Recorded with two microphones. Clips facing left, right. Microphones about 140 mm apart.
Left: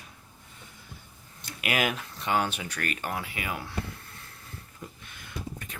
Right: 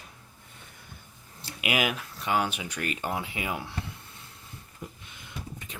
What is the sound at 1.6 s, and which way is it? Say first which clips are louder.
Speech: even; 10° right (ahead or behind).